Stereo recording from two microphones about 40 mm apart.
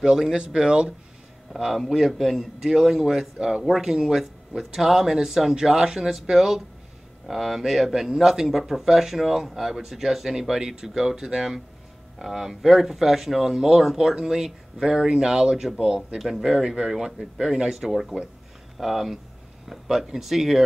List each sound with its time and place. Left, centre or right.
0.0 s speech: centre
1.6 s speech: centre
16.2 s speech: centre